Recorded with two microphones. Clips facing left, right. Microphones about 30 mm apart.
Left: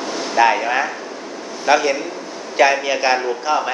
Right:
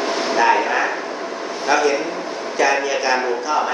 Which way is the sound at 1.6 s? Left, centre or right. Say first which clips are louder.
Left 1 dB; centre.